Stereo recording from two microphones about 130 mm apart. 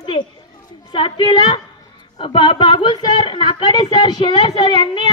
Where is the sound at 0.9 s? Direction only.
40° left (ahead or behind).